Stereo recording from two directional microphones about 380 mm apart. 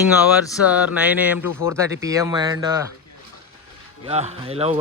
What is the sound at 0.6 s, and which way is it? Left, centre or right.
Speech, centre.